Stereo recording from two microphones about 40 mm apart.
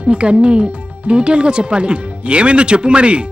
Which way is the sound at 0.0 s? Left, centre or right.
Right.